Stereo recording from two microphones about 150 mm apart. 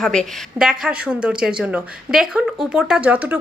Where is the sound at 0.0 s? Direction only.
5° left (ahead or behind).